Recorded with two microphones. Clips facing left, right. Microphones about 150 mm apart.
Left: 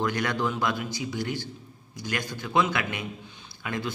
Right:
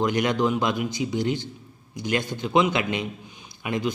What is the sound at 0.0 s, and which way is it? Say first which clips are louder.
A man's voice: right 5 dB; 20° right (ahead or behind).